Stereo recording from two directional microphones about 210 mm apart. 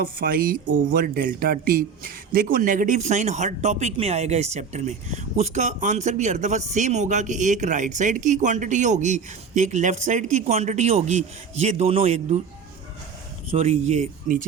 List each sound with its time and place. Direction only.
0.0 s speech: 45° right (ahead or behind)
13.5 s speech: 30° right (ahead or behind)